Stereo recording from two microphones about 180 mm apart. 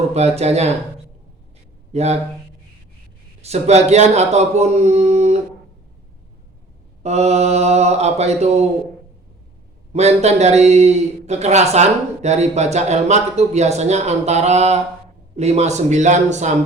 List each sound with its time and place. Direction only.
0.1 s a man's voice: 35° right (ahead or behind)
1.9 s speech: 35° right (ahead or behind)
3.4 s a man's voice: 35° right (ahead or behind)
7.0 s a man's voice: 35° right (ahead or behind)
9.9 s a man's voice: 35° right (ahead or behind)